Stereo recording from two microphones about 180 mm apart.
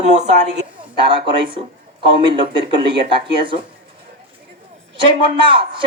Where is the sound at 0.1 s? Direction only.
40° right (ahead or behind).